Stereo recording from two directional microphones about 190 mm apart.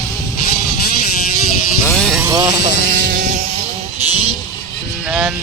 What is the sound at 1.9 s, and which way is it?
Vehicle, centre (ahead or behind).